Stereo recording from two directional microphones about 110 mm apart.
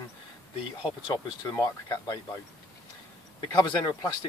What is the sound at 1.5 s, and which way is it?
Speech, 30° left (ahead or behind).